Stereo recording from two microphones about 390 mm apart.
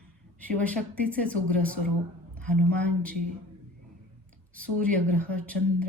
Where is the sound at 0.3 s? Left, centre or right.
Centre.